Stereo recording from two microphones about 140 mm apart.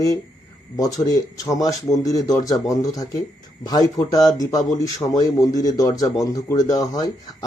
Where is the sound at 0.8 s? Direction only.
25° left (ahead or behind).